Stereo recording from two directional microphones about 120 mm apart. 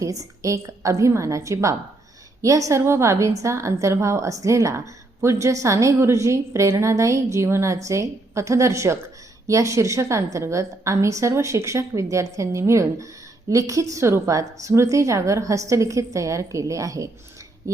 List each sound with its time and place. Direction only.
0.0 s a woman's voice: 25° right (ahead or behind)